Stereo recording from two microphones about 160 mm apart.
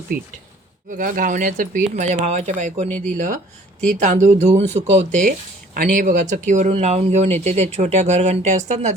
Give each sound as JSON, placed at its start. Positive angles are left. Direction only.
{"t": 0.9, "sound": "speech", "side_deg": -55}
{"t": 2.9, "sound": "speech", "side_deg": 10}
{"t": 4.0, "sound": "speech", "side_deg": -50}
{"t": 5.7, "sound": "speech", "side_deg": -55}